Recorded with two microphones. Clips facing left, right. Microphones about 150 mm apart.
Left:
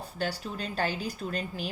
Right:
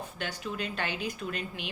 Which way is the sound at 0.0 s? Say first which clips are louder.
Left 3 dB; 35° left (ahead or behind).